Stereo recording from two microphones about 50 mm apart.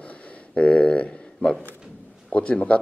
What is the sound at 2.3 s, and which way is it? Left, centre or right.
Speech, left.